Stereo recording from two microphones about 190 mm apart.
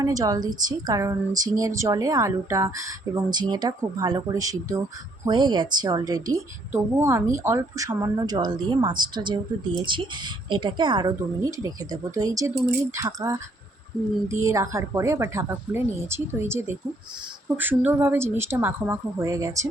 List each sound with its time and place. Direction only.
0.0 s speech: 20° right (ahead or behind)